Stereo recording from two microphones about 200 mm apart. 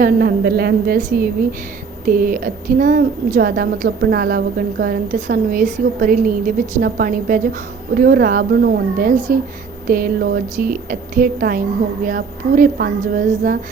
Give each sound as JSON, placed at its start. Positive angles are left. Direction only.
{"t": 0.0, "sound": "a woman's voice", "side_deg": -45}